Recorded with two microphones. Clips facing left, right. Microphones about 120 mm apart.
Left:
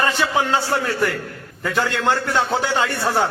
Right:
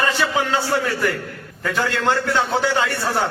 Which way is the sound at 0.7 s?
20° left (ahead or behind).